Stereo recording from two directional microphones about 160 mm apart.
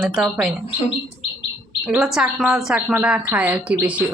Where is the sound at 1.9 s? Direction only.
5° right (ahead or behind).